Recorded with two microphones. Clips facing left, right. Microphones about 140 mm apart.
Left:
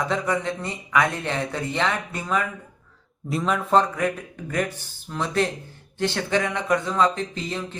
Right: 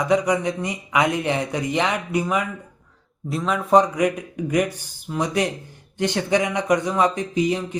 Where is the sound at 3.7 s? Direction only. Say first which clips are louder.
Right 5 dB; 15° right (ahead or behind).